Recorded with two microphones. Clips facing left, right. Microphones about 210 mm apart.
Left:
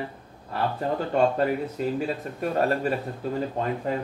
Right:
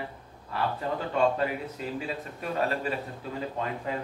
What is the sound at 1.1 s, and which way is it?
Speech, 45° left (ahead or behind).